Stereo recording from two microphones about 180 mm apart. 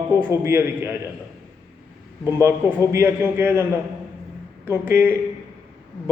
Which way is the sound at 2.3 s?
15° right (ahead or behind).